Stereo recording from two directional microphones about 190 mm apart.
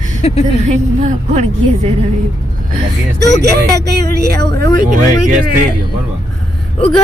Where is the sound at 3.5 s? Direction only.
55° right (ahead or behind).